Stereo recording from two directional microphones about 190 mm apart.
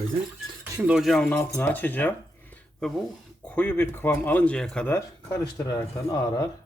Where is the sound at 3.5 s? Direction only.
10° left (ahead or behind).